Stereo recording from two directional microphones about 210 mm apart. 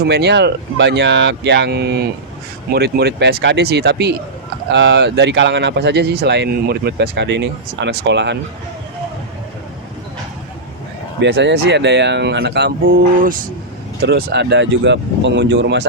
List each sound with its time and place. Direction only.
0.1 s speech: 55° right (ahead or behind)
11.2 s speech: 55° right (ahead or behind)